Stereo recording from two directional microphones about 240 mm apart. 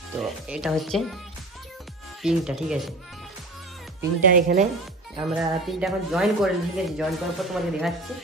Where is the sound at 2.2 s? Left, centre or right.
Centre.